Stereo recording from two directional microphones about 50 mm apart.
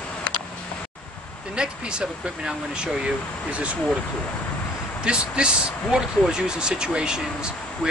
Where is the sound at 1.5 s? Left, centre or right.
Centre.